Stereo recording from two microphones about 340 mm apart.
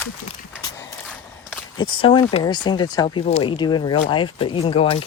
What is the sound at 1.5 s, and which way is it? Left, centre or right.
Speech, centre.